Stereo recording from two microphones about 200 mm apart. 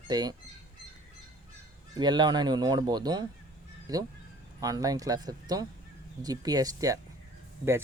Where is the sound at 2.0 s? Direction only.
20° right (ahead or behind).